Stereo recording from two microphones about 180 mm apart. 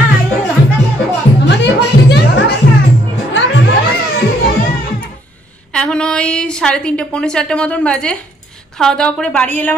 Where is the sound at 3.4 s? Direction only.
90° left.